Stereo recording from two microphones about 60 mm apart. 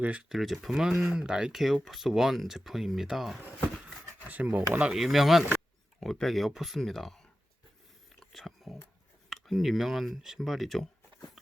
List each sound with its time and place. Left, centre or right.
0.0 s speech: right
0.3 s speech: centre
4.3 s speech: right
4.8 s speech: centre
8.3 s a sound: centre
9.3 s speech: centre